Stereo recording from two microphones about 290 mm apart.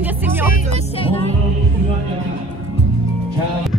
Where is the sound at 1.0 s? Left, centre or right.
Centre.